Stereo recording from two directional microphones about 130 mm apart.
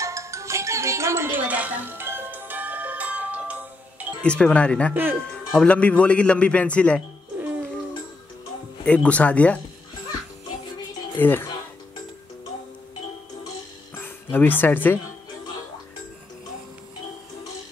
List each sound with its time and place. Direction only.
0.0 s music: 25° right (ahead or behind)
4.2 s a man's voice: 10° left (ahead or behind)
8.8 s a man's voice: 10° left (ahead or behind)
11.1 s a man's voice: 15° left (ahead or behind)
13.9 s speech: 15° left (ahead or behind)